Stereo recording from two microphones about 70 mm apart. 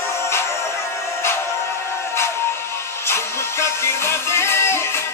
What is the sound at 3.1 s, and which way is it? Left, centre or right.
Music, left.